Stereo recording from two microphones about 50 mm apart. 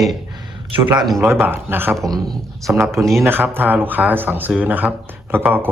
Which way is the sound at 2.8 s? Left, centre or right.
Right.